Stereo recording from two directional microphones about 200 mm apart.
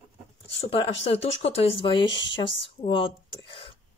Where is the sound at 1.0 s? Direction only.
30° left (ahead or behind).